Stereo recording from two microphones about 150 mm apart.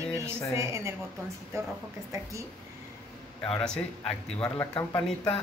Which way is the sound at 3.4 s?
5° left (ahead or behind).